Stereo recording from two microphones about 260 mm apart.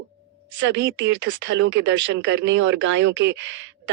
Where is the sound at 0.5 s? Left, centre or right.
Right.